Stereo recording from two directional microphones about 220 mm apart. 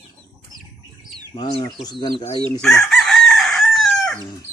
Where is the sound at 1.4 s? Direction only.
25° left (ahead or behind).